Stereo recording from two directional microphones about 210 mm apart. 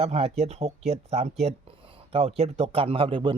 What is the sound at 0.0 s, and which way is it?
Speech, 30° right (ahead or behind).